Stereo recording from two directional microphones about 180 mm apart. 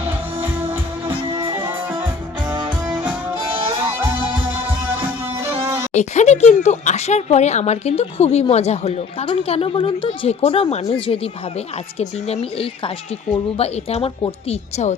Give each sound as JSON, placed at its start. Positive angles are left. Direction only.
{"t": 0.6, "sound": "music", "side_deg": -15}
{"t": 5.6, "sound": "music", "side_deg": -15}
{"t": 5.9, "sound": "speech", "side_deg": 40}